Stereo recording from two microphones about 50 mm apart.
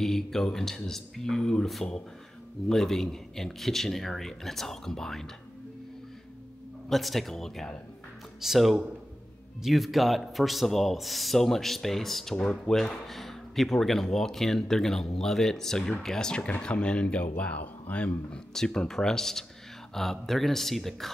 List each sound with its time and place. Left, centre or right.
0.0 s speech: centre
2.7 s speech: centre
6.9 s speech: centre; by 18.4 s left
18.5 s speech: centre